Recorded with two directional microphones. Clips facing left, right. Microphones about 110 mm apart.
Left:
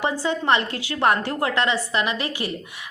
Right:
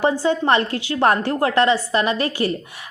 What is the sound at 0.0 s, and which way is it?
A woman's voice, 30° right (ahead or behind).